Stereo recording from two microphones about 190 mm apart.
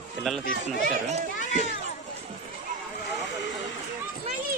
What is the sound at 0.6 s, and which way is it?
Speech, 40° right (ahead or behind).